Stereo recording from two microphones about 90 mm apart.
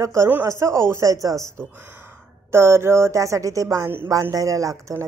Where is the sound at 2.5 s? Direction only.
30° right (ahead or behind).